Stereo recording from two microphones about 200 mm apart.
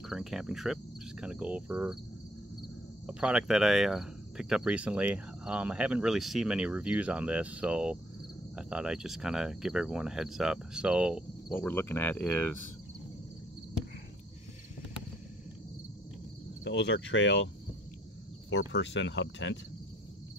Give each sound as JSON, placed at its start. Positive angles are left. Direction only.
{"t": 0.0, "sound": "cricket", "side_deg": 0}
{"t": 1.2, "sound": "speech", "side_deg": -5}
{"t": 3.1, "sound": "speech", "side_deg": -5}
{"t": 11.5, "sound": "speech", "side_deg": 10}
{"t": 16.6, "sound": "speech", "side_deg": 60}
{"t": 18.7, "sound": "speech", "side_deg": 65}